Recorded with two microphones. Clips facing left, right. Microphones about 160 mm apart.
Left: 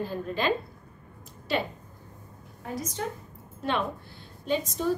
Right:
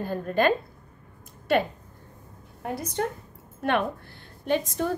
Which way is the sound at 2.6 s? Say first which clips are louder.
Right 4 dB; 65° right (ahead or behind).